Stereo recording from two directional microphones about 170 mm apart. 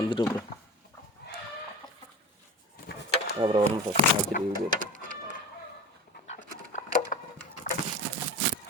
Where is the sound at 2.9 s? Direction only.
75° left (ahead or behind).